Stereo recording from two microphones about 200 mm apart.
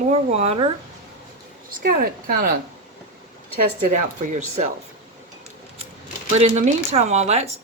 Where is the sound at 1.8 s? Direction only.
45° right (ahead or behind).